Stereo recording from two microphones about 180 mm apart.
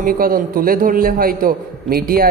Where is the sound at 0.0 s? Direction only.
55° right (ahead or behind).